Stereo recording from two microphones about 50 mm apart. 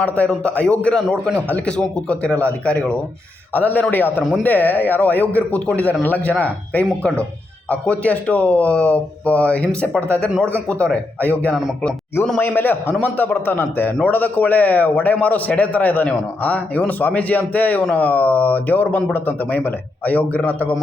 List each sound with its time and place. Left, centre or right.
0.5 s a man's voice: left
1.6 s speech: left
3.5 s a man's voice: left
12.4 s a man's voice: left